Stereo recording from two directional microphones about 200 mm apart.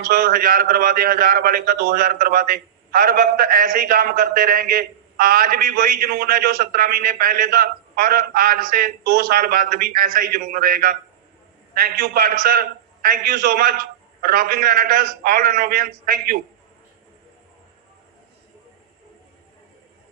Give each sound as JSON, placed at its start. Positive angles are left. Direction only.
{"t": 0.0, "sound": "a man's voice", "side_deg": -45}